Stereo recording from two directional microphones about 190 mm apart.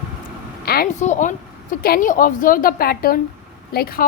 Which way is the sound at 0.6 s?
55° left (ahead or behind).